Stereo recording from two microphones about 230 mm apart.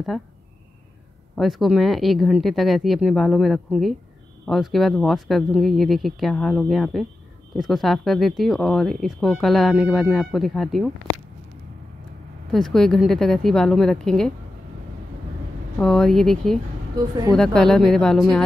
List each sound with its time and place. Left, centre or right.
0.1 s speech: centre
1.3 s speech: centre
12.4 s speech: centre
15.8 s speech: centre
17.0 s speech: centre
17.3 s speech: centre